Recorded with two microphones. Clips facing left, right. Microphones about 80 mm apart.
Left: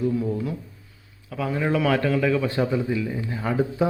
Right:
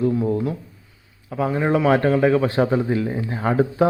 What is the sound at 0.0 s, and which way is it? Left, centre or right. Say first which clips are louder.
Speech: right 4 dB; right.